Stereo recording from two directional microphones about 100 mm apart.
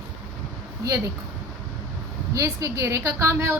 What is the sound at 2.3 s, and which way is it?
A woman's voice, 35° right (ahead or behind).